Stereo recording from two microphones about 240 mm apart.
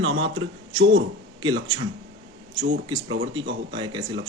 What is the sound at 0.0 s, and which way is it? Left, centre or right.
A man's voice, right.